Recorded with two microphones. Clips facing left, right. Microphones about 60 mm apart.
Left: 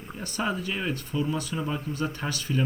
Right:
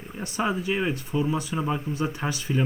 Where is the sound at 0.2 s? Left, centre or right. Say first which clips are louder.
Right 3 dB; centre.